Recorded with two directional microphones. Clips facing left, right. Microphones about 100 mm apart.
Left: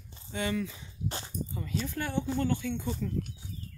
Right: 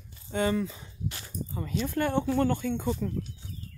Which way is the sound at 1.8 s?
55° right (ahead or behind).